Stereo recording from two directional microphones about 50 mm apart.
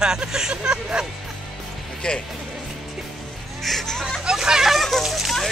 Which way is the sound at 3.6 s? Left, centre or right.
Centre.